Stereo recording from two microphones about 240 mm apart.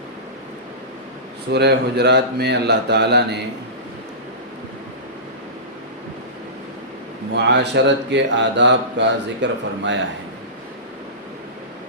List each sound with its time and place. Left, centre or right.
1.5 s a man's voice: right
7.3 s a man's voice: right